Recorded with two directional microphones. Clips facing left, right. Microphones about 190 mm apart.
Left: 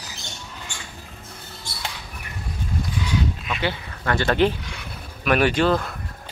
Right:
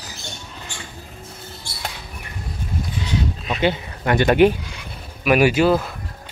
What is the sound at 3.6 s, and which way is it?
Speech, 20° right (ahead or behind).